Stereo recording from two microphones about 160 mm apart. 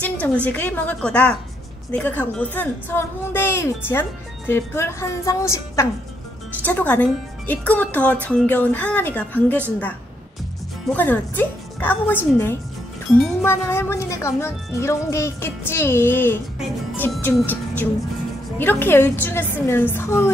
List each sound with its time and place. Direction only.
0.0 s a sound: 10° left (ahead or behind)
0.5 s speech: 10° left (ahead or behind)
10.9 s speech: 10° left (ahead or behind)